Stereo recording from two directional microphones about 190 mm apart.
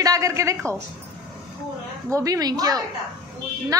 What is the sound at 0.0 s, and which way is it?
Speech, 15° right (ahead or behind).